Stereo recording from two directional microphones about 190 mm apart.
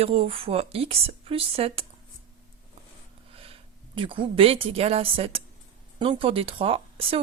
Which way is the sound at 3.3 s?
30° right (ahead or behind).